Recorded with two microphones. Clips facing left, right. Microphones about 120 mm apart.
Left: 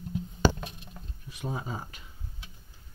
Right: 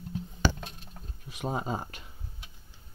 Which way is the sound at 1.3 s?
70° right (ahead or behind).